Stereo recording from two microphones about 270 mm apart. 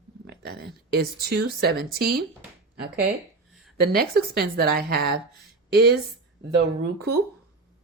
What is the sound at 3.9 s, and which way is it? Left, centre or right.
A woman's voice, right.